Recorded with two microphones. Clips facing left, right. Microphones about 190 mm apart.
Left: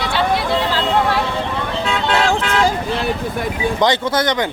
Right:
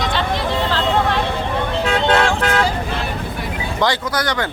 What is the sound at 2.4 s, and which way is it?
Vehicle, 45° right (ahead or behind).